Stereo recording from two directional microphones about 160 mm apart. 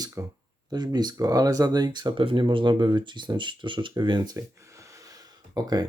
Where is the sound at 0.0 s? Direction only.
20° right (ahead or behind).